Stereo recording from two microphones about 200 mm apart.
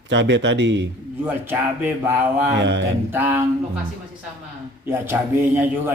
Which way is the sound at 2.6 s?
60° right (ahead or behind).